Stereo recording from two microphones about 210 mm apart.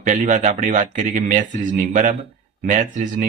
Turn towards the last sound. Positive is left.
turn(degrees=-40)  # may be behind; listen again after turning